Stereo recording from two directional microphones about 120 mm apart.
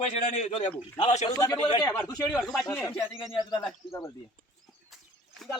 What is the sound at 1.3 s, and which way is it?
A man's voice, 35° left (ahead or behind).